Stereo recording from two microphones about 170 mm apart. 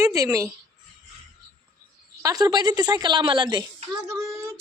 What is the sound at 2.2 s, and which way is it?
A woman's voice, 20° right (ahead or behind).